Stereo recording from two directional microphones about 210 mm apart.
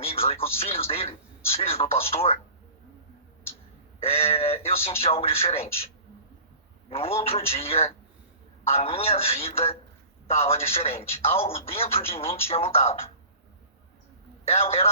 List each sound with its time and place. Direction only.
0.0 s speech: 30° left (ahead or behind)
4.0 s speech: 30° left (ahead or behind)
6.9 s speech: 30° left (ahead or behind)
14.4 s speech: 30° left (ahead or behind)